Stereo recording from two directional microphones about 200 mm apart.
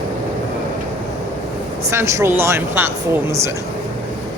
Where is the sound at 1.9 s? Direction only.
15° right (ahead or behind).